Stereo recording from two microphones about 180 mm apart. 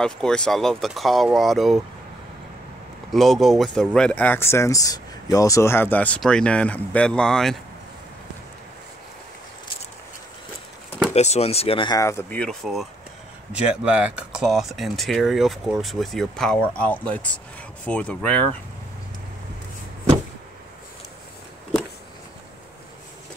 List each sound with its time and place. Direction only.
0.0 s speech: 5° left (ahead or behind)
3.1 s speech: centre (ahead or behind)
11.1 s speech: 35° left (ahead or behind); by 18.4 s 5° left (ahead or behind)